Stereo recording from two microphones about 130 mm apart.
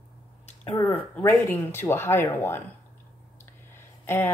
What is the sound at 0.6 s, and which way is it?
Speech, 15° left (ahead or behind).